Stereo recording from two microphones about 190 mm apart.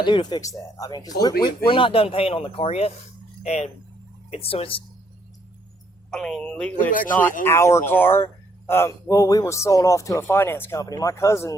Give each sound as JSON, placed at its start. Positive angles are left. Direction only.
{"t": 0.0, "sound": "speech", "side_deg": 25}
{"t": 6.1, "sound": "speech", "side_deg": 5}